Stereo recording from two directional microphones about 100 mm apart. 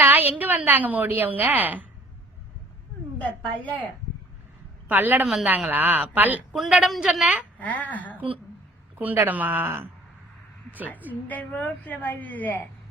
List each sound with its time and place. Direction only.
0.0 s a woman's voice: 20° right (ahead or behind)
3.2 s a woman's voice: 15° left (ahead or behind)
4.9 s a woman's voice: 20° right (ahead or behind)
5.2 s a woman's voice: 5° right (ahead or behind)
5.7 s speech: 15° right (ahead or behind)
6.5 s a woman's voice: 5° right (ahead or behind)
7.6 s a woman's voice: 15° left (ahead or behind)
9.0 s speech: 20° right (ahead or behind)
11.1 s a woman's voice: 15° left (ahead or behind)